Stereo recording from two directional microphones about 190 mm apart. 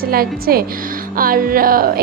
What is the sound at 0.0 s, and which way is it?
A woman's voice, 50° right (ahead or behind).